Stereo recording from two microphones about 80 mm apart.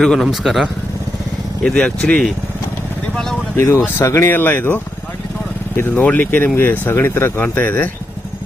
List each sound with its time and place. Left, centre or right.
0.0 s a man's voice: centre
1.6 s speech: centre
3.5 s speech: left
4.3 s speech: left